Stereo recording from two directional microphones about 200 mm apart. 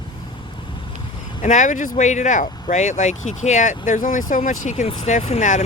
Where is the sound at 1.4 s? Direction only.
40° left (ahead or behind).